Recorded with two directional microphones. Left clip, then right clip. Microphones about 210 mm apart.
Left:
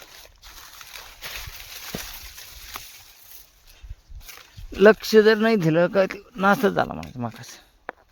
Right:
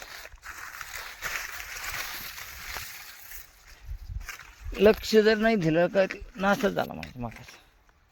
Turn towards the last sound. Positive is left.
turn(degrees=35)  # may be behind; listen again after turning